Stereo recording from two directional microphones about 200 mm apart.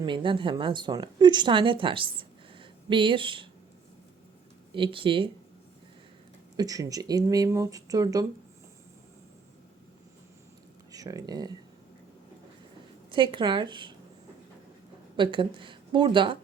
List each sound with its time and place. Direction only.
0.0 s a woman's voice: 25° right (ahead or behind)
4.7 s a woman's voice: 25° right (ahead or behind)
6.6 s speech: 15° right (ahead or behind)
10.9 s a woman's voice: 20° right (ahead or behind)
13.1 s a woman's voice: 25° right (ahead or behind)
15.1 s a woman's voice: 25° right (ahead or behind)